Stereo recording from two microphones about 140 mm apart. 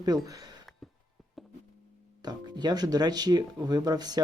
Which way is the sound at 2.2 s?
30° right (ahead or behind).